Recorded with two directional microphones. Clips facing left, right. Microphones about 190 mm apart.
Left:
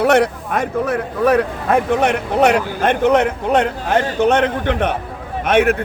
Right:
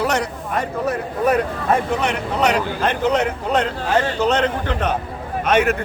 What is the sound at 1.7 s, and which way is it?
Speech, 55° left (ahead or behind).